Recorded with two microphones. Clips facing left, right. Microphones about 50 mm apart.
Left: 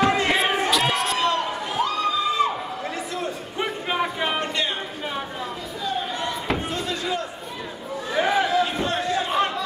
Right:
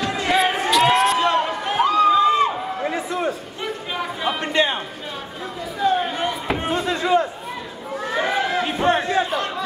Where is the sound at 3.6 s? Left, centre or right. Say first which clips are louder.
Left 3 dB; centre.